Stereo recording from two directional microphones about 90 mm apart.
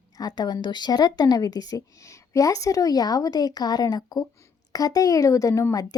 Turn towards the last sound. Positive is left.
turn(degrees=45)  # may be behind; listen again after turning